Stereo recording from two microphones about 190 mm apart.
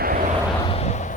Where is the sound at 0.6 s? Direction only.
30° left (ahead or behind).